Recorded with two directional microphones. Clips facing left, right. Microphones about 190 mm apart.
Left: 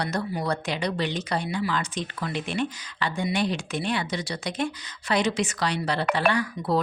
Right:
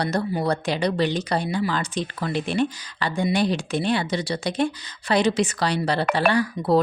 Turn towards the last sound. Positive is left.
turn(degrees=-35)  # may be behind; listen again after turning